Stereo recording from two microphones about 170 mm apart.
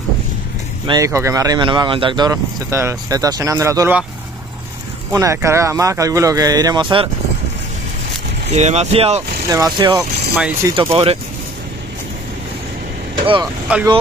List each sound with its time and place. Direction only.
0.8 s speech: 20° right (ahead or behind)
5.1 s speech: 15° right (ahead or behind)
8.5 s speech: 40° right (ahead or behind)
9.5 s speech: 25° right (ahead or behind)
9.9 s speech: centre (ahead or behind)
10.8 s speech: 35° right (ahead or behind)
13.7 s speech: 10° right (ahead or behind)